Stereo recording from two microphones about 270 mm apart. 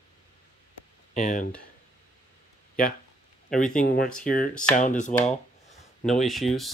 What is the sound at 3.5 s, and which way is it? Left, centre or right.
Speech, centre.